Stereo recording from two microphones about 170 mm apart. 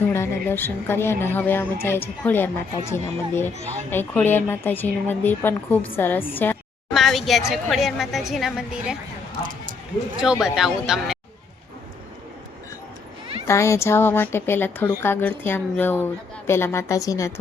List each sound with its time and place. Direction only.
0.1 s a woman's voice: 15° left (ahead or behind)
6.9 s a woman's voice: centre (ahead or behind)
10.4 s a woman's voice: 5° right (ahead or behind)
13.5 s speech: 15° left (ahead or behind)